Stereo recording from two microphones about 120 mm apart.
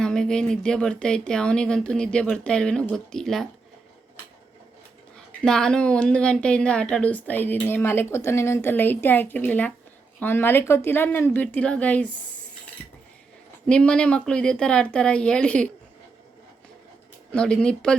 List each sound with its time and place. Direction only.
0.0 s a woman's voice: 5° left (ahead or behind)
5.1 s a woman's voice: 5° left (ahead or behind)
13.7 s a woman's voice: 10° left (ahead or behind)
17.3 s a woman's voice: 5° left (ahead or behind)